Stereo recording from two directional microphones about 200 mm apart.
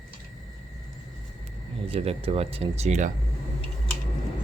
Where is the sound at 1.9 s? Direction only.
30° right (ahead or behind).